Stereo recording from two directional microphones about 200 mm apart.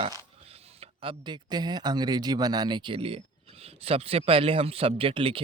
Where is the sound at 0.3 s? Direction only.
30° right (ahead or behind).